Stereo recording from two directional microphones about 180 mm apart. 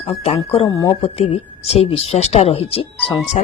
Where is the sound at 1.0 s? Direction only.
35° left (ahead or behind).